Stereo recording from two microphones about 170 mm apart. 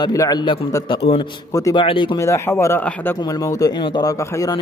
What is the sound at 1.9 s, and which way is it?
Speech, 30° left (ahead or behind).